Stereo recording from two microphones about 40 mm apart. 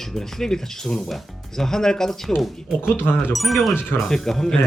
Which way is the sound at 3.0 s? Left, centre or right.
Left.